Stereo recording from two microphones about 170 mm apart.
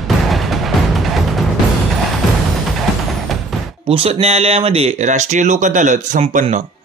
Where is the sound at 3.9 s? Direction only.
35° right (ahead or behind).